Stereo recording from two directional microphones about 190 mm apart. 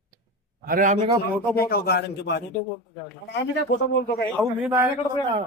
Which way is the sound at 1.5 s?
55° left (ahead or behind).